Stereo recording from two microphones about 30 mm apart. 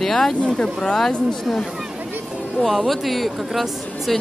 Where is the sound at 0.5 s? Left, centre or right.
Left.